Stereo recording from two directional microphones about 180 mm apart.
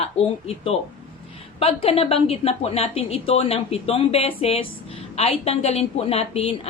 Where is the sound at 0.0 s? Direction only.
35° left (ahead or behind).